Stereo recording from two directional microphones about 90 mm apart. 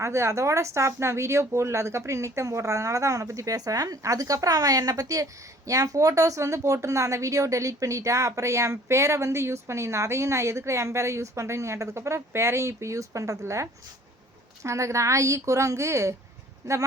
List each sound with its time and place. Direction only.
0.0 s speech: 30° right (ahead or behind)